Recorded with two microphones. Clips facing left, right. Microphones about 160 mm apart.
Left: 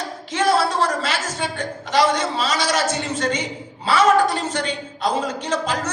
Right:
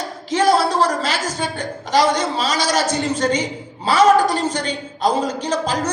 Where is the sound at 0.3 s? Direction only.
35° right (ahead or behind).